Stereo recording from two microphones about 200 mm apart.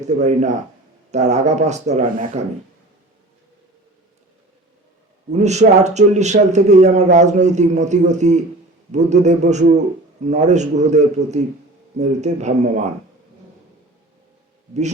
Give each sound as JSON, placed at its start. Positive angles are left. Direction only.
{"t": 0.0, "sound": "a man's voice", "side_deg": -35}
{"t": 5.3, "sound": "a man's voice", "side_deg": -35}
{"t": 14.7, "sound": "a man's voice", "side_deg": -35}